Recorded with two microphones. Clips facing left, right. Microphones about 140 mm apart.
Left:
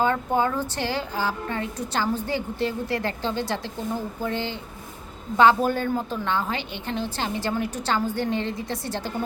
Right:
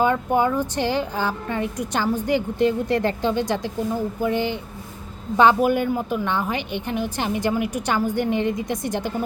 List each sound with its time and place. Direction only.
0.0 s a woman's voice: 15° right (ahead or behind)